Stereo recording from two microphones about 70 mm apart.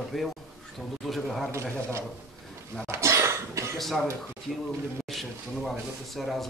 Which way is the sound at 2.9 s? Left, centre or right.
Right.